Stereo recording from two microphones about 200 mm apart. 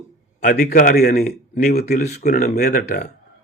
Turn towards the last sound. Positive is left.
turn(degrees=35)  # may be behind; listen again after turning